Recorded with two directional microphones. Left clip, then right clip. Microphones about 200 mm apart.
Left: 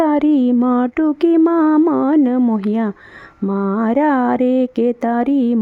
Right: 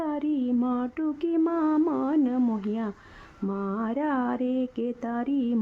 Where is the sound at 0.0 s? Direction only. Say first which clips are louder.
Left 14 dB; 45° left (ahead or behind).